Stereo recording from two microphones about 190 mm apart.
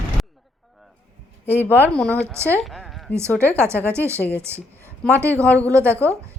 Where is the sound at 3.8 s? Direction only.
15° right (ahead or behind).